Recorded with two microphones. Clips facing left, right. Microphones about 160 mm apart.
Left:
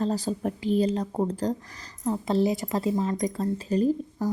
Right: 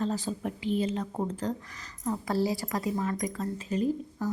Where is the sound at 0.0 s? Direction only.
35° left (ahead or behind).